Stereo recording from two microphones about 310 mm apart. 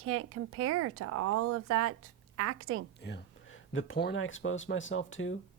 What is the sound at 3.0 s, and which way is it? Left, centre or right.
Speech, left.